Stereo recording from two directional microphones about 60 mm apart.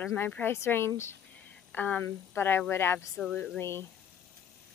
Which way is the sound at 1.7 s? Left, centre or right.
Left.